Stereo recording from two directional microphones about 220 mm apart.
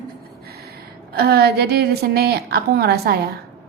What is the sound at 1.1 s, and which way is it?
A woman's voice, 45° right (ahead or behind).